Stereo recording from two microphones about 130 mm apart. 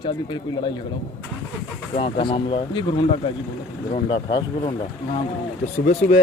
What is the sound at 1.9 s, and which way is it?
Speech, 40° left (ahead or behind).